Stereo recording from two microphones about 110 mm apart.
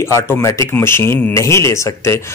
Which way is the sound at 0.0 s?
25° left (ahead or behind).